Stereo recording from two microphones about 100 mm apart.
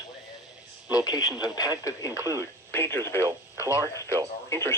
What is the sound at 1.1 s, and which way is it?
Speech, 45° left (ahead or behind).